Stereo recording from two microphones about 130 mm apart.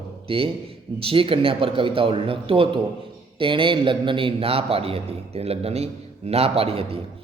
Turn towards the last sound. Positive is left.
turn(degrees=-50)  # may be behind; listen again after turning